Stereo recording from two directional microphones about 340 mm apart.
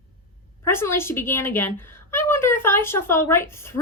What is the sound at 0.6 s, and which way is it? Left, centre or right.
A woman's voice, centre.